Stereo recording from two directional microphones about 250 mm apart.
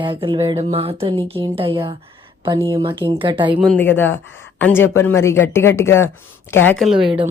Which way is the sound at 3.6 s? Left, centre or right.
Centre.